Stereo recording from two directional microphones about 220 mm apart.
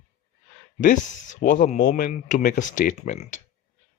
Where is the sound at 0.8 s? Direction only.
35° left (ahead or behind).